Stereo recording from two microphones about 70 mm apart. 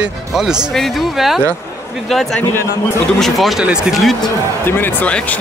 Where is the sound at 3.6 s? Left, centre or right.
Centre.